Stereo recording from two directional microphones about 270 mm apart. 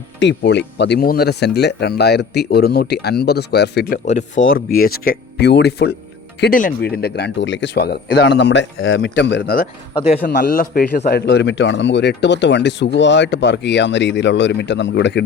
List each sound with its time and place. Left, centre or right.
0.2 s a man's voice: left
4.4 s a man's voice: left